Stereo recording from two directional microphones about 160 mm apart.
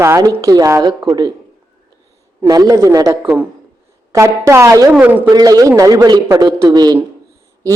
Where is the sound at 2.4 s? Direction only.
25° right (ahead or behind).